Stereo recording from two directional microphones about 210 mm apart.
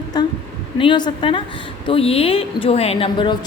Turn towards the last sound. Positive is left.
turn(degrees=20)  # may be behind; listen again after turning